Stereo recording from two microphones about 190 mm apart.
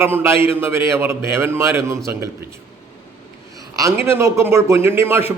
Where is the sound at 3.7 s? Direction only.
15° right (ahead or behind).